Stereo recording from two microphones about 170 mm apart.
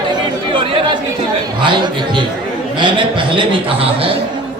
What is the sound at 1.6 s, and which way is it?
A man's voice, 30° right (ahead or behind).